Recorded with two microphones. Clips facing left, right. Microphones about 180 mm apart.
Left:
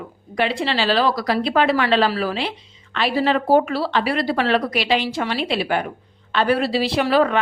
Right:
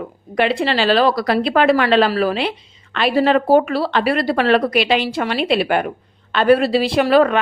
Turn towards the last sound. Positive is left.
turn(degrees=-55)  # may be behind; listen again after turning